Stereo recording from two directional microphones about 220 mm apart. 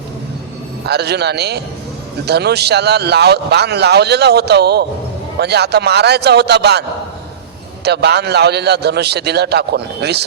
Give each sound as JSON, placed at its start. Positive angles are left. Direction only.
{"t": 0.9, "sound": "speech", "side_deg": -50}
{"t": 7.9, "sound": "speech", "side_deg": -50}